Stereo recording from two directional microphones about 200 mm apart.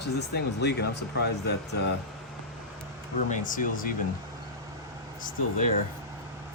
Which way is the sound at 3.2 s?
40° left (ahead or behind).